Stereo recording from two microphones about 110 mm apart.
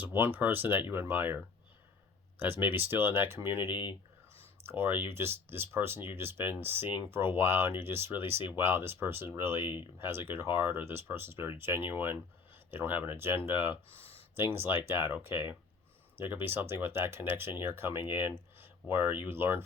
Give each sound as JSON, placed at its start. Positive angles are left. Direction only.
{"t": 0.0, "sound": "speech", "side_deg": -20}
{"t": 2.4, "sound": "speech", "side_deg": -20}
{"t": 3.6, "sound": "speech", "side_deg": 45}
{"t": 4.6, "sound": "speech", "side_deg": -20}